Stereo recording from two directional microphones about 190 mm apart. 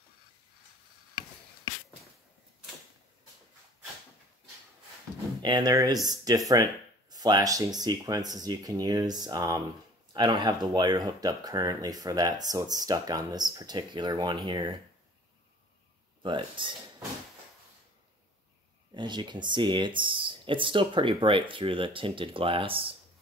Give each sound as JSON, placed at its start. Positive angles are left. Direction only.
{"t": 5.4, "sound": "speech", "side_deg": -20}
{"t": 16.2, "sound": "speech", "side_deg": -25}
{"t": 18.9, "sound": "speech", "side_deg": -25}